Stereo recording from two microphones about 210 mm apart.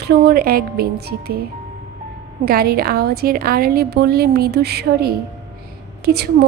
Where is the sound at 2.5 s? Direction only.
45° right (ahead or behind).